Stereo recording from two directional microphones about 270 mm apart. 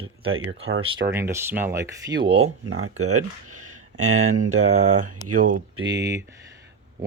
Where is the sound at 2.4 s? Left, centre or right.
Right.